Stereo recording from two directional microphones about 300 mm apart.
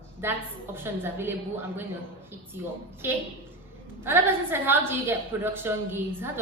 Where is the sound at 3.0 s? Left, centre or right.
Centre.